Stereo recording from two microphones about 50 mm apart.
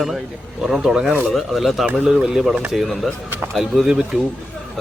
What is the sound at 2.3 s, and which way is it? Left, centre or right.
Speech, centre.